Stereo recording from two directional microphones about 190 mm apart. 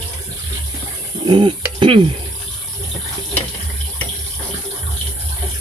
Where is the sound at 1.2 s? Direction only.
25° right (ahead or behind).